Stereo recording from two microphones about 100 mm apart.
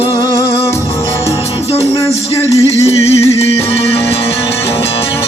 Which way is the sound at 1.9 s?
35° left (ahead or behind).